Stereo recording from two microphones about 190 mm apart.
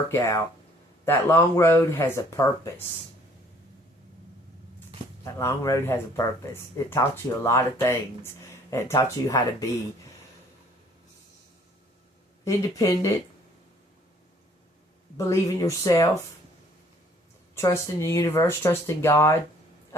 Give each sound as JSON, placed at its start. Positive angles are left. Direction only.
{"t": 0.1, "sound": "speech", "side_deg": 15}
{"t": 5.2, "sound": "speech", "side_deg": 15}
{"t": 12.5, "sound": "speech", "side_deg": 15}
{"t": 15.3, "sound": "speech", "side_deg": 15}
{"t": 17.5, "sound": "speech", "side_deg": 15}